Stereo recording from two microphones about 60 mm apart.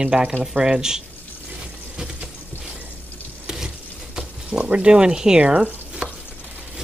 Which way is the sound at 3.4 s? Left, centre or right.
Centre.